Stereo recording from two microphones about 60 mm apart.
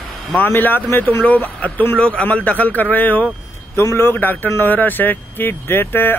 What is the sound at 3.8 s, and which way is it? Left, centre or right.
Speech, left.